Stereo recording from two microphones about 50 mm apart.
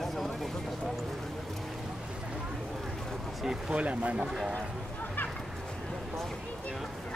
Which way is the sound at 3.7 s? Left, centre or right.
Right.